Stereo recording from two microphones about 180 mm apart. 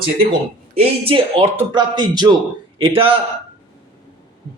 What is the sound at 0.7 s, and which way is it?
A man's voice, 35° right (ahead or behind).